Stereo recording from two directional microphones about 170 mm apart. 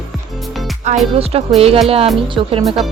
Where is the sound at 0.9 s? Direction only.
45° right (ahead or behind).